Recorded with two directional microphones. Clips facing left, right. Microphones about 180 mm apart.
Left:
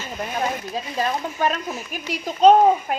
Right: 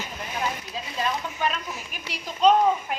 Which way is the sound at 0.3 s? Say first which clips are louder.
Left 4 dB; 45° left (ahead or behind).